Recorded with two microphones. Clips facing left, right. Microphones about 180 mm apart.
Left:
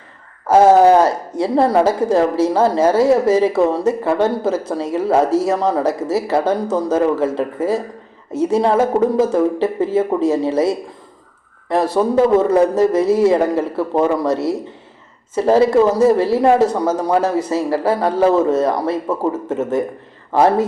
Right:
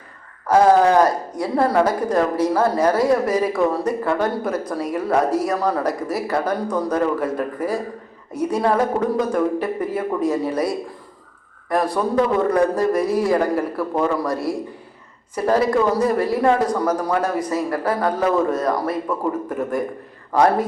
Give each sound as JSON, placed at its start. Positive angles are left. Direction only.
{"t": 0.4, "sound": "a woman's voice", "side_deg": 25}